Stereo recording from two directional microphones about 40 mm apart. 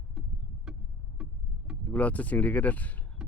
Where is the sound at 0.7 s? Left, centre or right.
Centre.